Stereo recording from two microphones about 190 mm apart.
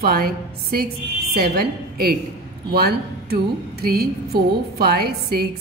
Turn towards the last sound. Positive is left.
turn(degrees=-55)  # may be behind; listen again after turning